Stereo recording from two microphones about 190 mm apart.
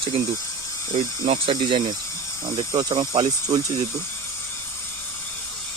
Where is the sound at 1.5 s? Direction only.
25° right (ahead or behind).